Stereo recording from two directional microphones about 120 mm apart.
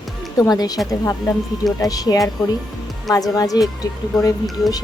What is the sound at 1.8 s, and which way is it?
A woman's voice, 30° left (ahead or behind).